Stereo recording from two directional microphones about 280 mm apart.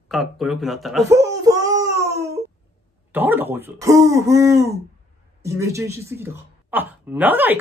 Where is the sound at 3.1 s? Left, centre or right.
Centre.